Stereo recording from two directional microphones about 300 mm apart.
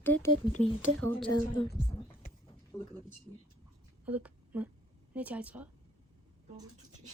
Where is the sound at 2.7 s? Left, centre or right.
Centre.